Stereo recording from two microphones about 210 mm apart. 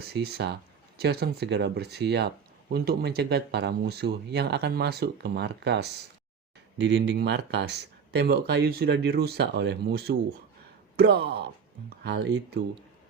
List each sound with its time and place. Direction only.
0.1 s speech: 50° right (ahead or behind)